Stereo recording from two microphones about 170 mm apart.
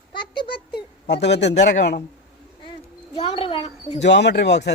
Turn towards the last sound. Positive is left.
turn(degrees=85)